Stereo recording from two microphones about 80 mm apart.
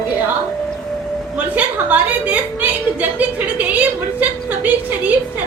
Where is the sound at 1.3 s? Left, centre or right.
Centre.